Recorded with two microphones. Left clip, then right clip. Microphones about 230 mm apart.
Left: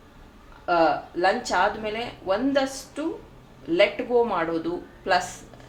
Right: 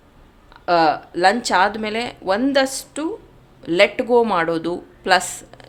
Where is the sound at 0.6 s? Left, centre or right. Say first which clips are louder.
Right 5 dB; right.